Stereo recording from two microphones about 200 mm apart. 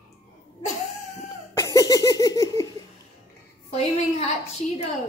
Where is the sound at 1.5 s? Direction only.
15° left (ahead or behind).